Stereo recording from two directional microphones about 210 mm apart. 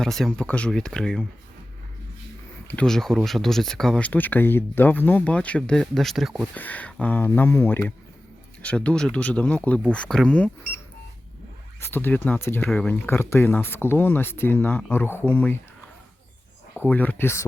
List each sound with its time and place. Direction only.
0.0 s speech: centre (ahead or behind)
2.6 s speech: 5° left (ahead or behind)
11.8 s speech: 10° left (ahead or behind)
16.7 s speech: 10° left (ahead or behind)